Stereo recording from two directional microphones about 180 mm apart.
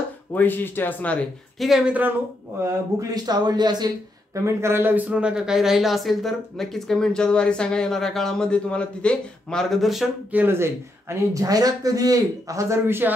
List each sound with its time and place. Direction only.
0.3 s speech: 10° left (ahead or behind)
1.6 s a man's voice: 5° right (ahead or behind)
2.6 s speech: 20° right (ahead or behind); by 10.4 s centre (ahead or behind)
10.4 s a man's voice: 15° right (ahead or behind)